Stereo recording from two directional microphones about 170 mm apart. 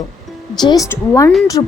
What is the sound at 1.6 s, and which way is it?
Speech, 25° left (ahead or behind).